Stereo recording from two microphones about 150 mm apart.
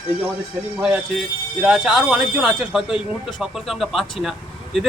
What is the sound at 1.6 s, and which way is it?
Speech, 5° right (ahead or behind).